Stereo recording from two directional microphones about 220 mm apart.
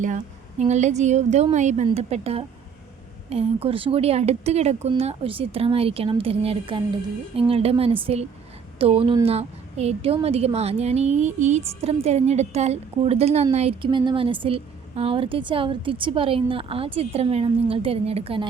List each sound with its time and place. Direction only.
0.6 s a woman's voice: 30° right (ahead or behind)